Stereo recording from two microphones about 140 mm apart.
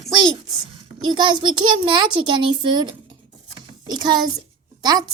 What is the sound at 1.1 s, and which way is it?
Child singing, 35° right (ahead or behind).